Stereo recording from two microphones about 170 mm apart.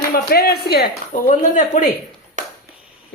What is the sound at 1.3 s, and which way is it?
Speech, 50° left (ahead or behind).